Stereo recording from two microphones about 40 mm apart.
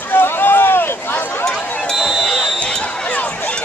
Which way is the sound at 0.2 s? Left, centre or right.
Left.